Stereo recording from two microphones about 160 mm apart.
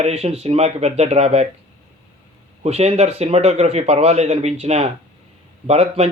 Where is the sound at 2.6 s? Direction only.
40° right (ahead or behind).